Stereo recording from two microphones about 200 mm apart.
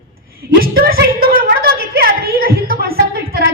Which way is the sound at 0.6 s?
50° right (ahead or behind).